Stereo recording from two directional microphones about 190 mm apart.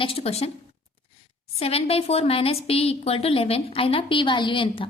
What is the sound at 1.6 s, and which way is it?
A woman's voice, 30° left (ahead or behind).